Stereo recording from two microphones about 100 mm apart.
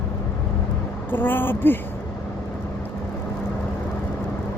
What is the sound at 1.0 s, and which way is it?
Speech, 20° left (ahead or behind).